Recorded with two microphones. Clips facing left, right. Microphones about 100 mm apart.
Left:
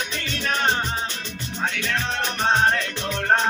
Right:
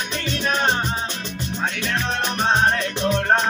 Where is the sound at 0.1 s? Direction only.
20° right (ahead or behind).